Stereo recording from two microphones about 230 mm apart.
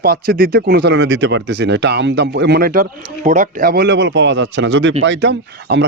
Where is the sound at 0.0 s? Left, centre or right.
Right.